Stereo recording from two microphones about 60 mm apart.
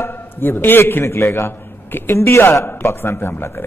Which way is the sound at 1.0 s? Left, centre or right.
Left.